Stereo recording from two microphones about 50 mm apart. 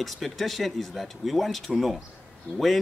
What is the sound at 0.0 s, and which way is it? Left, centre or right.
Speech, centre.